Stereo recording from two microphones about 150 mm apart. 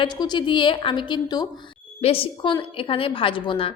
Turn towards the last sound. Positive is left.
turn(degrees=35)  # may be behind; listen again after turning